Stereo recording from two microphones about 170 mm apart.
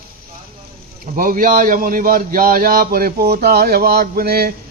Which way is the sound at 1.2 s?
55° right (ahead or behind).